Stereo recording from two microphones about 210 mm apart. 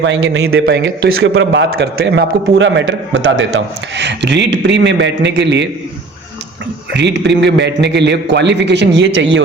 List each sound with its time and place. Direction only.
0.0 s a man's voice: 55° right (ahead or behind)
6.9 s a man's voice: 55° right (ahead or behind)